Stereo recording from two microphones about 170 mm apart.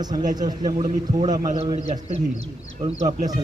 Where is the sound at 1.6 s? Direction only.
40° right (ahead or behind).